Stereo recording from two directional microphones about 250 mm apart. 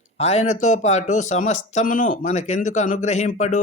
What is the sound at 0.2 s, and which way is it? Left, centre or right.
Speech, left.